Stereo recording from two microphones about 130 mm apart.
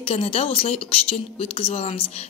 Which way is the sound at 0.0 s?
50° left (ahead or behind).